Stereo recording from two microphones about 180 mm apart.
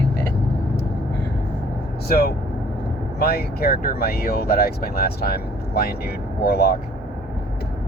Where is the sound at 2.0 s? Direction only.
60° left (ahead or behind).